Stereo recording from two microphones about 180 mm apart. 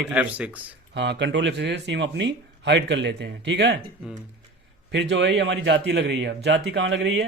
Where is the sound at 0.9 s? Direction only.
75° right (ahead or behind).